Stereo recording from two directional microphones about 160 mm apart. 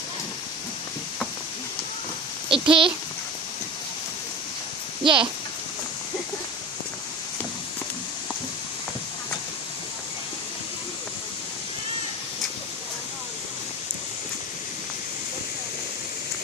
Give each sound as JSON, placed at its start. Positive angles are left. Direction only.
{"t": 2.5, "sound": "a child's voice", "side_deg": -35}
{"t": 5.0, "sound": "a child's voice", "side_deg": -30}